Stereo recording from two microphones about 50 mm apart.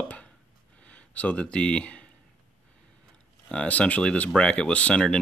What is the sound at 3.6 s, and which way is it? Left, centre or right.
Speech, left.